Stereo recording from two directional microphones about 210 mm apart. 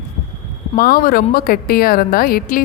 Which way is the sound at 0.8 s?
45° left (ahead or behind).